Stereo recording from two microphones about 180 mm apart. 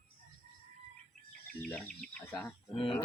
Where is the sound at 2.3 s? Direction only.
10° left (ahead or behind).